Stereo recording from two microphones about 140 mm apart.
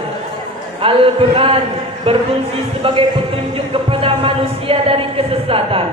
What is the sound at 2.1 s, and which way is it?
Speech, 45° right (ahead or behind).